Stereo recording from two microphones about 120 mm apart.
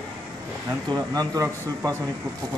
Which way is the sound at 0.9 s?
30° right (ahead or behind).